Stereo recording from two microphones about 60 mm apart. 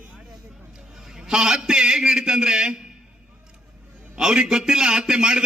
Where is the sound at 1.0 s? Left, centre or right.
Centre.